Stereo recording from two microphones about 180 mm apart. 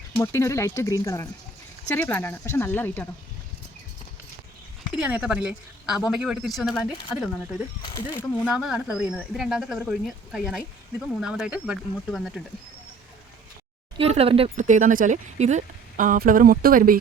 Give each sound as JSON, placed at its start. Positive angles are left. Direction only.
{"t": 0.2, "sound": "speech", "side_deg": 15}
{"t": 4.9, "sound": "a woman's voice", "side_deg": -5}
{"t": 7.8, "sound": "speech", "side_deg": 25}
{"t": 8.4, "sound": "a woman's voice", "side_deg": -5}
{"t": 14.0, "sound": "speech", "side_deg": -35}